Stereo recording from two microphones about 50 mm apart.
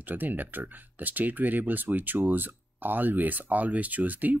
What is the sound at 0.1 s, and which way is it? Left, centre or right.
Speech, right.